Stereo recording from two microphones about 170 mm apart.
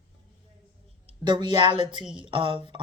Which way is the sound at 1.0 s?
25° right (ahead or behind).